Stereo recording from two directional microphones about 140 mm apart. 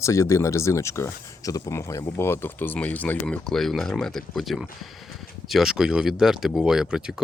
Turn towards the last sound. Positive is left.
turn(degrees=-5)  # may be behind; listen again after turning